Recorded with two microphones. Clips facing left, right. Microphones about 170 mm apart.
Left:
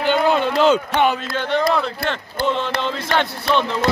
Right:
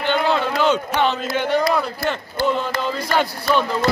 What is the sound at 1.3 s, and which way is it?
Speech, 15° right (ahead or behind).